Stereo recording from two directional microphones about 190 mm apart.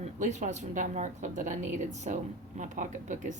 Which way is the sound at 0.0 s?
40° right (ahead or behind).